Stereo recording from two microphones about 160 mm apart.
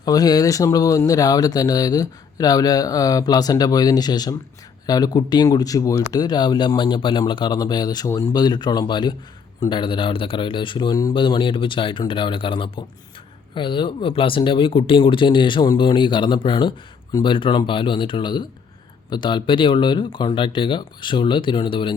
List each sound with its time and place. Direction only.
0.0 s speech: 25° left (ahead or behind)